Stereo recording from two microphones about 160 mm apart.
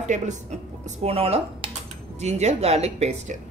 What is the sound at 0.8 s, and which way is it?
Speech, 40° right (ahead or behind).